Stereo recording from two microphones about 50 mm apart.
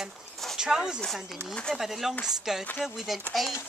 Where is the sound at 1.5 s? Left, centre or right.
Centre.